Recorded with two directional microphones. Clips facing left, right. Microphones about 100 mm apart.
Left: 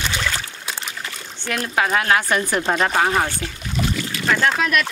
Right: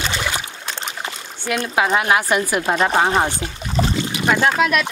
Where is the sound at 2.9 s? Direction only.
20° right (ahead or behind).